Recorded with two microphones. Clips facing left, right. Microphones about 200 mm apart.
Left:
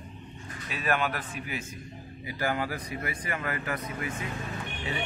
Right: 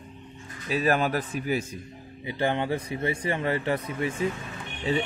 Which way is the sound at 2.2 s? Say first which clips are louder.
Right 4 dB; 25° right (ahead or behind).